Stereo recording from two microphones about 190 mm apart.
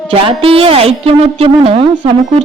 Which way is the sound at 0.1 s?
30° right (ahead or behind).